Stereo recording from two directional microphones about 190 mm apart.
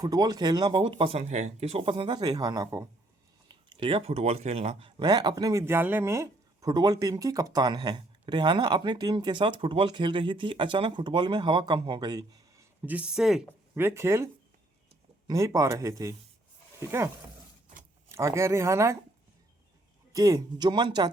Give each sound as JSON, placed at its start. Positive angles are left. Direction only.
{"t": 0.0, "sound": "speech", "side_deg": -20}
{"t": 13.8, "sound": "speech", "side_deg": -15}
{"t": 15.3, "sound": "speech", "side_deg": -15}
{"t": 18.1, "sound": "speech", "side_deg": -15}
{"t": 20.1, "sound": "speech", "side_deg": -20}